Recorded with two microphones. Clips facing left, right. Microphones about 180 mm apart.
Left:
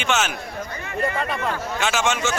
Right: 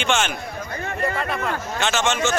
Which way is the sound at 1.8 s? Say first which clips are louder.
Right 1 dB; 5° left (ahead or behind).